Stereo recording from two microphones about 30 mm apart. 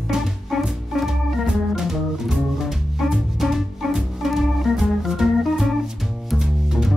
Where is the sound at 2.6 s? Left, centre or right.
Centre.